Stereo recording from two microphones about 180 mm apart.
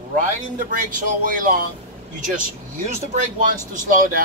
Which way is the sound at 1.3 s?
50° right (ahead or behind).